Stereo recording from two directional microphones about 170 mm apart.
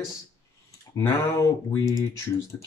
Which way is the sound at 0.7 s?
15° left (ahead or behind).